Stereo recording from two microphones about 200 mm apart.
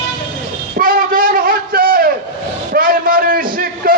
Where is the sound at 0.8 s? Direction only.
45° right (ahead or behind).